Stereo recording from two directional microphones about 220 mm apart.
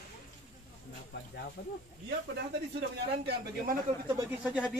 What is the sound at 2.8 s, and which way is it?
A man's voice, 45° right (ahead or behind).